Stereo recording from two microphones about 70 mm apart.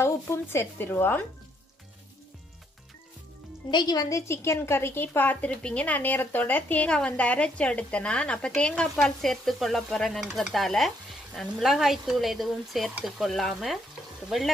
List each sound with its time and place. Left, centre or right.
0.0 s speech: left
3.7 s a woman's voice: left
4.1 s a woman's voice: left; by 8.9 s centre
9.0 s stir: centre